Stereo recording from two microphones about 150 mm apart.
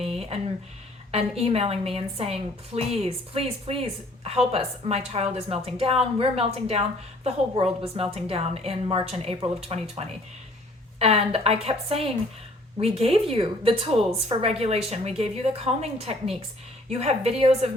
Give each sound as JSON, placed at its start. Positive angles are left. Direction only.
{"t": 0.0, "sound": "a sound", "side_deg": -45}
{"t": 1.1, "sound": "a woman's voice", "side_deg": -40}
{"t": 11.0, "sound": "a woman's voice", "side_deg": -40}